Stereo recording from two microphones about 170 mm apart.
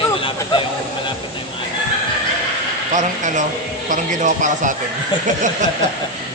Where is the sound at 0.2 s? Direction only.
30° left (ahead or behind).